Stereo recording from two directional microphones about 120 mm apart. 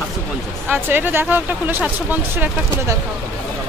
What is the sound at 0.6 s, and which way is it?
Speech, 15° right (ahead or behind).